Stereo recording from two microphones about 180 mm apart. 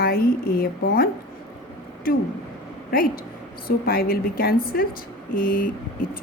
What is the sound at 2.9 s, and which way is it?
A woman's voice, 55° left (ahead or behind).